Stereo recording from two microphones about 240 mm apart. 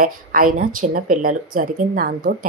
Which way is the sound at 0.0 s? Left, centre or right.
Right.